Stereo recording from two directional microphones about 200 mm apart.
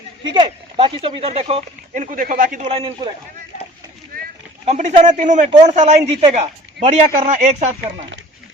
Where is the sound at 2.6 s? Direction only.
25° right (ahead or behind).